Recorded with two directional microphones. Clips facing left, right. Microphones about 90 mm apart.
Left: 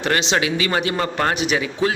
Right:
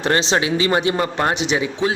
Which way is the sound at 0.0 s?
35° right (ahead or behind).